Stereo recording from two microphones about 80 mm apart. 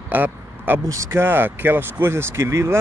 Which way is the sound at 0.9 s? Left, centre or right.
Right.